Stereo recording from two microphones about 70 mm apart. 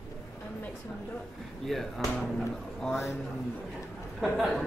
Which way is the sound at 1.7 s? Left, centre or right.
Centre.